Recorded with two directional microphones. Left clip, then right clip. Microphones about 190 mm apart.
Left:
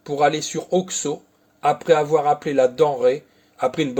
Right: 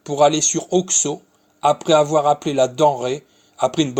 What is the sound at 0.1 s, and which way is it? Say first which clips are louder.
A man's voice: right 4 dB; 35° right (ahead or behind).